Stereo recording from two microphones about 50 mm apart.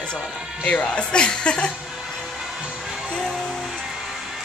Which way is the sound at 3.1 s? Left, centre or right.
Centre.